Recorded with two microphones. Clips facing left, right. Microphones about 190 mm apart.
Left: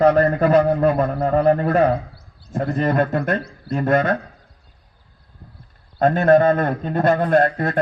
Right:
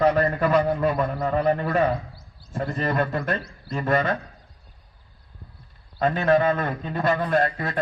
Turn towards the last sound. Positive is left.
turn(degrees=45)  # may be behind; listen again after turning